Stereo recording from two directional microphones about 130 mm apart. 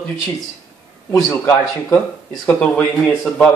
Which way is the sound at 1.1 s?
15° left (ahead or behind).